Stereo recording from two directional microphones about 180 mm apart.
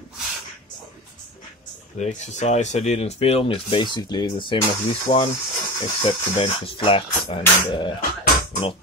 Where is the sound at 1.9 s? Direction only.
40° left (ahead or behind).